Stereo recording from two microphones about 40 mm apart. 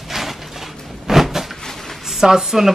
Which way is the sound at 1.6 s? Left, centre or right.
Centre.